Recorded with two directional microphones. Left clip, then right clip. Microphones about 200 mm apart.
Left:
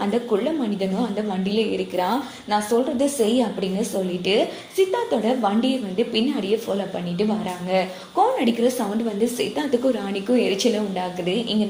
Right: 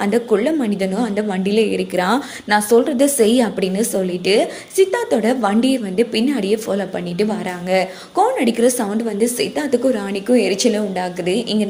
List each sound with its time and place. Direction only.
0.0 s a woman's voice: 35° right (ahead or behind)
4.3 s a woman's voice: 30° right (ahead or behind)